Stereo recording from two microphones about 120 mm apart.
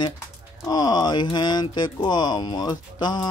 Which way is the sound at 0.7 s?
35° left (ahead or behind).